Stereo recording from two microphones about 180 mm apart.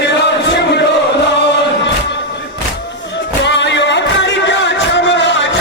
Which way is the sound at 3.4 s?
75° left (ahead or behind).